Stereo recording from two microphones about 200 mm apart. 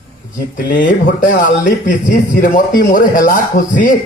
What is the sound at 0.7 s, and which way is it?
Speech, 40° left (ahead or behind).